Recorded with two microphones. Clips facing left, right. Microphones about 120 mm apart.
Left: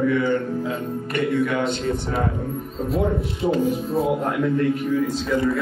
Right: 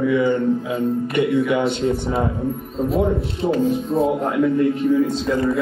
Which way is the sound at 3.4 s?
30° right (ahead or behind).